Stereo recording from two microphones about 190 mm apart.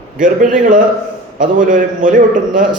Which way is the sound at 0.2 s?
45° right (ahead or behind).